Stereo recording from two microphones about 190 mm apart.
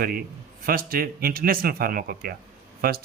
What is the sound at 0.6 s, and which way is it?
Speech, 50° right (ahead or behind).